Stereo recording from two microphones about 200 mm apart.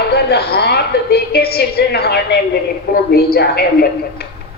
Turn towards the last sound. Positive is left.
turn(degrees=55)  # may be behind; listen again after turning